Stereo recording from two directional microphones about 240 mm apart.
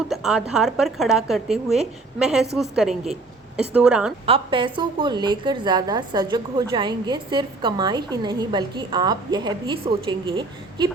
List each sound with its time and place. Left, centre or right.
0.1 s a woman's voice: centre
4.3 s a woman's voice: right